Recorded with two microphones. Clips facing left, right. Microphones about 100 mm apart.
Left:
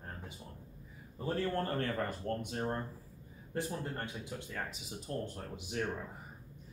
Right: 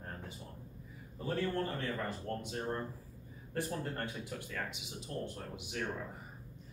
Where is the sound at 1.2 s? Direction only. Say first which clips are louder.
Left 1 dB; 45° left (ahead or behind).